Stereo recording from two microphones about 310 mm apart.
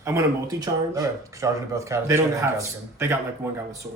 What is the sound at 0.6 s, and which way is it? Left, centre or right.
Speech, centre.